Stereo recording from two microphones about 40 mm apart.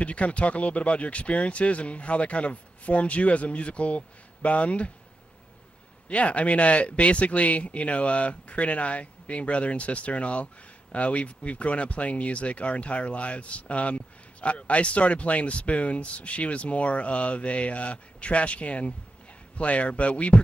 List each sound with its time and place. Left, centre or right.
0.0 s speech: left
6.0 s speech: left